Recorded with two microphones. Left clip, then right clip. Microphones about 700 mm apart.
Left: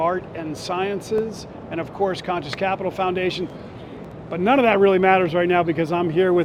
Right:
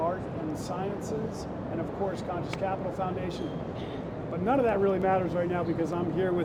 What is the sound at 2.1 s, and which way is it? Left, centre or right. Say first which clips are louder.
Speech: left 8 dB; left.